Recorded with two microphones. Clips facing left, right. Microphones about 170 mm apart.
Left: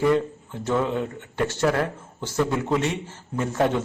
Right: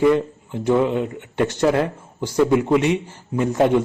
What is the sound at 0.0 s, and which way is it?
Speech, 20° right (ahead or behind).